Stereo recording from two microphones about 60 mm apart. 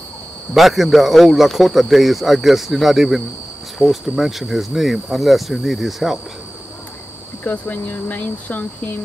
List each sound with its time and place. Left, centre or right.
0.6 s speech: centre
7.4 s speech: left